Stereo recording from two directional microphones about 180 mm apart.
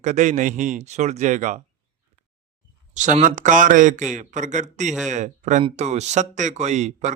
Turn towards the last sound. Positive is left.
turn(degrees=-40)  # may be behind; listen again after turning